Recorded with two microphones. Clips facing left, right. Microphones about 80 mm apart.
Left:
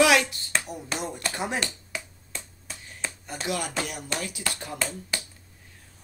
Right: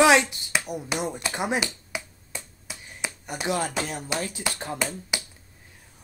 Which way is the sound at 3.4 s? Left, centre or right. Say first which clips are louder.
Right 3 dB; right.